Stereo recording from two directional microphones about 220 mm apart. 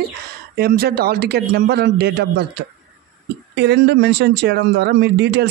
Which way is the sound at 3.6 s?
50° right (ahead or behind).